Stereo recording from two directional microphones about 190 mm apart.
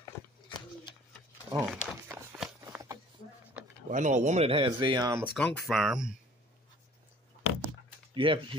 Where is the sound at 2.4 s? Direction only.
15° right (ahead or behind).